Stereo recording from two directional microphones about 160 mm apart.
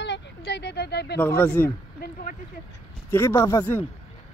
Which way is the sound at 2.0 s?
55° left (ahead or behind).